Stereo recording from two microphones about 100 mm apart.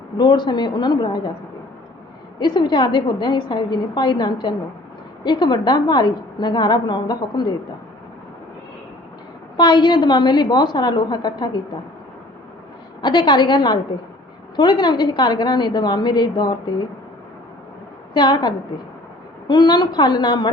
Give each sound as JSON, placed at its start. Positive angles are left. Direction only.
{"t": 0.2, "sound": "a woman's voice", "side_deg": 50}
{"t": 2.4, "sound": "a woman's voice", "side_deg": 50}
{"t": 9.6, "sound": "a woman's voice", "side_deg": 50}
{"t": 13.0, "sound": "a woman's voice", "side_deg": 55}
{"t": 18.1, "sound": "a woman's voice", "side_deg": 50}